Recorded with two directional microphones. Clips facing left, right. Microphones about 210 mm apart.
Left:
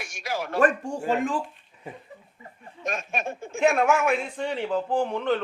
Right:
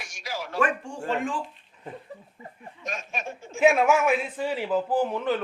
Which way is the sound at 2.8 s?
55° left (ahead or behind).